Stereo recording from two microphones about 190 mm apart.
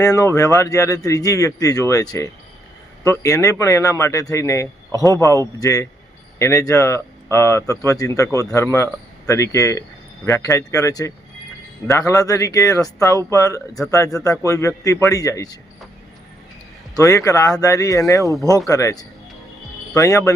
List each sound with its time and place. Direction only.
0.0 s speech: 15° left (ahead or behind)
17.0 s speech: 15° left (ahead or behind)